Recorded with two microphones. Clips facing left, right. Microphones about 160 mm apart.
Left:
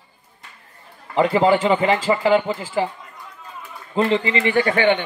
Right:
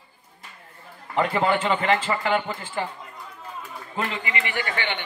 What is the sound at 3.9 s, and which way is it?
Speech, 30° left (ahead or behind).